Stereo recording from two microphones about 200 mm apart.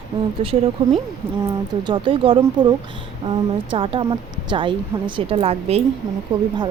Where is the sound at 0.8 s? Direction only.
25° right (ahead or behind).